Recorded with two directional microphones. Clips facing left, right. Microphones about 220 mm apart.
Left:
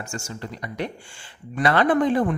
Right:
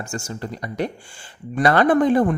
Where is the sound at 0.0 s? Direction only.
35° right (ahead or behind).